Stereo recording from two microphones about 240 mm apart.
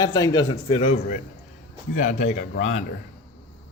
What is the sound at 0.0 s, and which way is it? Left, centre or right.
A man's voice, centre.